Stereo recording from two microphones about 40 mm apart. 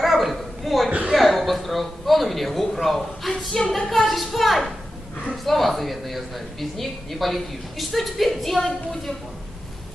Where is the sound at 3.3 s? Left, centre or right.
Centre.